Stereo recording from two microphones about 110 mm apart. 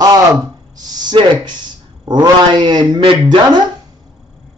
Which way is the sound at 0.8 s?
40° right (ahead or behind).